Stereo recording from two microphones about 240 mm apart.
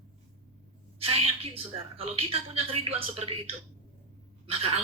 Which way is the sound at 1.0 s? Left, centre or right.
Right.